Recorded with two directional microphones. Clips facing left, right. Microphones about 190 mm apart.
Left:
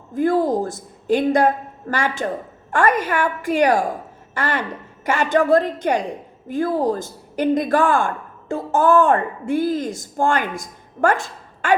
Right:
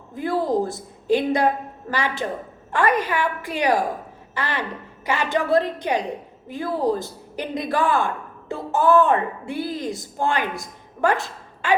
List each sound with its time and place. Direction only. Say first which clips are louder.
0.1 s a woman's voice: left 4 dB; 45° left (ahead or behind)